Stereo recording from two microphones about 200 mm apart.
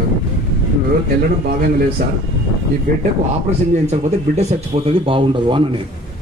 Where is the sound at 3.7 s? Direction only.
35° right (ahead or behind).